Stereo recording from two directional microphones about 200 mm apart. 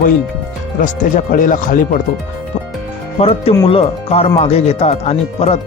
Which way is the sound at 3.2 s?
30° left (ahead or behind).